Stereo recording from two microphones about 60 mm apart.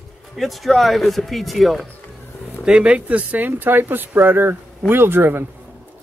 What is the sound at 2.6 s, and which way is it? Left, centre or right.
Speech, centre.